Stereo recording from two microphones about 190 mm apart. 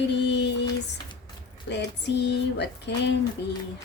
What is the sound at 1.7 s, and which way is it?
A woman's voice, 65° left (ahead or behind).